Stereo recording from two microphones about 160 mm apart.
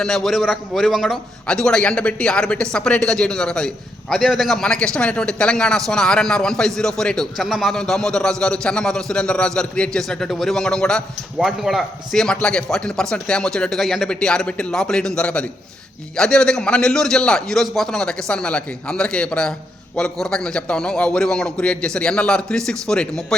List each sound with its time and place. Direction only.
0.0 s a man's voice: centre (ahead or behind)